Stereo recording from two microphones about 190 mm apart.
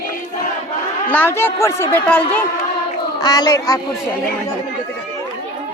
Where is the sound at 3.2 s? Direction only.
20° left (ahead or behind).